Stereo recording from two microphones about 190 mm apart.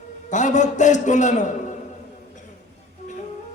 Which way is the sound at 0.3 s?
40° left (ahead or behind).